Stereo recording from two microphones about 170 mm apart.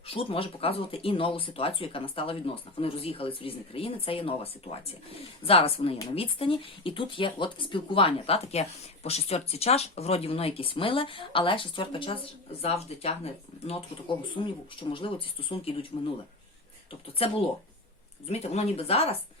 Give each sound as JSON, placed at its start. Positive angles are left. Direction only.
{"t": 0.0, "sound": "speech", "side_deg": 35}
{"t": 17.2, "sound": "speech", "side_deg": 35}